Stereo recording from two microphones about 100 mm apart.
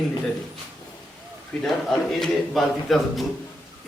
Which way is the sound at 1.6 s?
5° left (ahead or behind).